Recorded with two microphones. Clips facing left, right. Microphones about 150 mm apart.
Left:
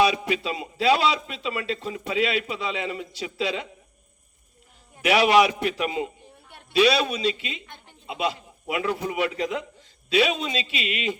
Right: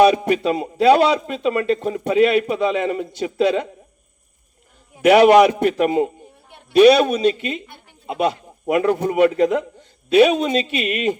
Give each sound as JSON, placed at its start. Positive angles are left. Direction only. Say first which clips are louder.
{"t": 0.0, "sound": "a man's voice", "louder": "right 8 dB", "side_deg": -50}
{"t": 5.0, "sound": "a man's voice", "louder": "right 8 dB", "side_deg": -50}